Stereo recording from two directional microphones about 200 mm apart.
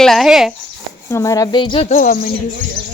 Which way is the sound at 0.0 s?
Centre (ahead or behind).